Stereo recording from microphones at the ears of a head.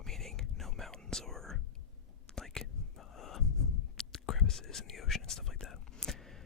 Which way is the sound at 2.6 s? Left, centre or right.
Left.